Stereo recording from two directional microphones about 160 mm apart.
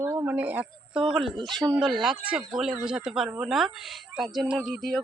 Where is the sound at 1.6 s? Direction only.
20° right (ahead or behind).